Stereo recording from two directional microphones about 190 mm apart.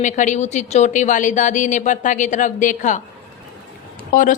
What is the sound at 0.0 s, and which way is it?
A woman's voice, 40° left (ahead or behind).